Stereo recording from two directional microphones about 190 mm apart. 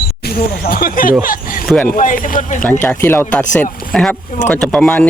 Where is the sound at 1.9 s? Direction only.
45° left (ahead or behind).